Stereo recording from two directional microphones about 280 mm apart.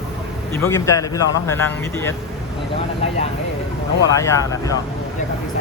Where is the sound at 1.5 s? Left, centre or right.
Centre.